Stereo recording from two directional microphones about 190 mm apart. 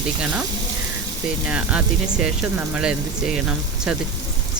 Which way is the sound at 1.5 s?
5° right (ahead or behind).